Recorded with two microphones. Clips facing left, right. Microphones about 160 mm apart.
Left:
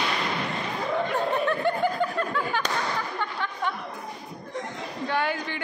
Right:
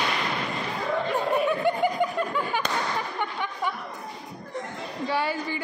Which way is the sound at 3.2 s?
15° right (ahead or behind).